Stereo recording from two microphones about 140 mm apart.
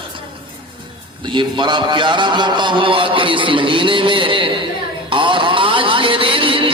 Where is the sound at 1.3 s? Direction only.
35° right (ahead or behind).